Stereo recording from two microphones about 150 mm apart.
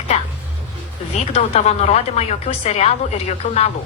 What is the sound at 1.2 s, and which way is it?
Speech, 45° left (ahead or behind).